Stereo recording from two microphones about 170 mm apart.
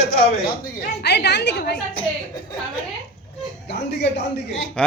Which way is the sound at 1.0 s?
75° left (ahead or behind).